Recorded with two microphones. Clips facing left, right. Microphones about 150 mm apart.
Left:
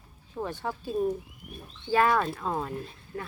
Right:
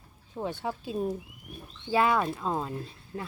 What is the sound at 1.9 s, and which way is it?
Speech, 15° right (ahead or behind).